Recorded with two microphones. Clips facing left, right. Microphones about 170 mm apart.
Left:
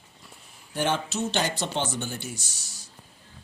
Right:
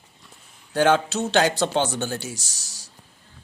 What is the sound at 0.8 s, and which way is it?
Speech, 90° right.